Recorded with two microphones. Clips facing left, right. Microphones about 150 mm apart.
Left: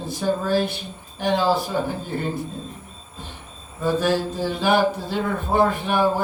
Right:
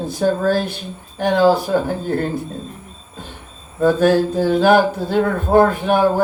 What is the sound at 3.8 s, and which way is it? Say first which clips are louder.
Speech: right 7 dB; 50° right (ahead or behind).